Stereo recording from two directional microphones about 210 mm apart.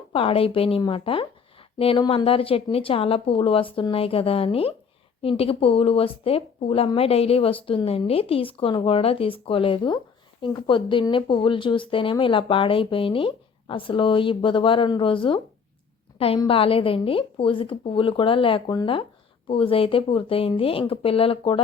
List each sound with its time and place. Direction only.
0.1 s speech: 25° left (ahead or behind)